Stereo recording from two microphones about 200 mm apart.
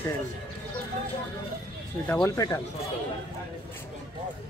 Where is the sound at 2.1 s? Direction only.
10° left (ahead or behind).